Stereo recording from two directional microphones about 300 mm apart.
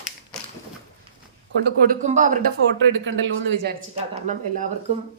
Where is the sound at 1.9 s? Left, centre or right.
Right.